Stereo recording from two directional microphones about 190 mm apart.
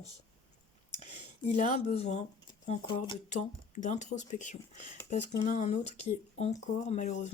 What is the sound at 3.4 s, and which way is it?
Speech, 40° left (ahead or behind).